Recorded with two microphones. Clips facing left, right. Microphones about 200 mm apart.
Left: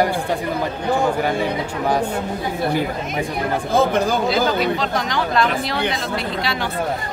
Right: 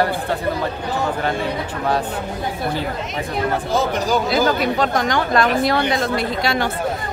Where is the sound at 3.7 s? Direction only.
55° left (ahead or behind).